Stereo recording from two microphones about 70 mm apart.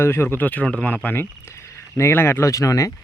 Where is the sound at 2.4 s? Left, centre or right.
Left.